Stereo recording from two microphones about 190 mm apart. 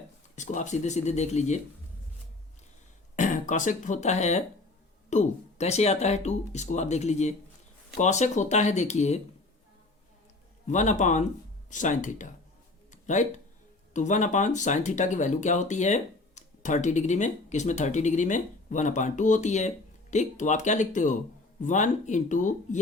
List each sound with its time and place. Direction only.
0.3 s speech: 40° left (ahead or behind)
3.2 s speech: 40° left (ahead or behind)
10.7 s speech: 40° left (ahead or behind)
12.9 s a sound: 40° left (ahead or behind)
13.9 s speech: 40° left (ahead or behind)